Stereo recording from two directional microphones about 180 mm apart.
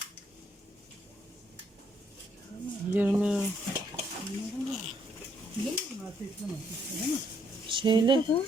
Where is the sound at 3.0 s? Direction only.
10° right (ahead or behind).